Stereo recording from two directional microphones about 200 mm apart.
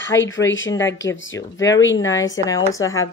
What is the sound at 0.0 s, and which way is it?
Speech, 70° left (ahead or behind).